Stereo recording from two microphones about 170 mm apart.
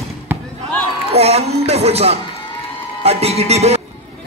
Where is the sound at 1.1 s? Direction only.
35° right (ahead or behind).